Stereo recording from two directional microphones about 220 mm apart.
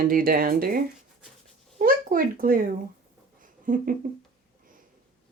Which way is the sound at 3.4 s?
40° right (ahead or behind).